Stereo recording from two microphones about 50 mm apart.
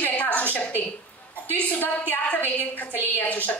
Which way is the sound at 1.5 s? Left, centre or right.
Left.